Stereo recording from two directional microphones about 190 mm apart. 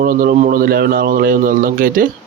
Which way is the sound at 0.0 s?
50° right (ahead or behind).